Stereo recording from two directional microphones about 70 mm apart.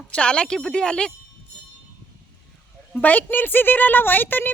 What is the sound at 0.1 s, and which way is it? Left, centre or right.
Speech, centre.